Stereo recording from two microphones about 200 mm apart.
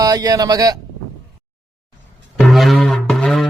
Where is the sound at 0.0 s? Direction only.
20° right (ahead or behind).